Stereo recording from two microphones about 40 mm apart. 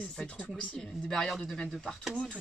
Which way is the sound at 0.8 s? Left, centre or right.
Centre.